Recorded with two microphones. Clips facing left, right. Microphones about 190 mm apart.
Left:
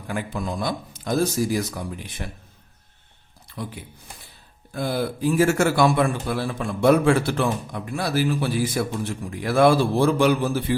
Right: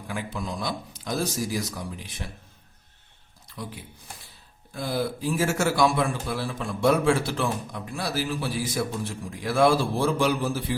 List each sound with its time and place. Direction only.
0.1 s a man's voice: 55° left (ahead or behind)
3.4 s a sound: 55° left (ahead or behind)
4.7 s a man's voice: 60° left (ahead or behind)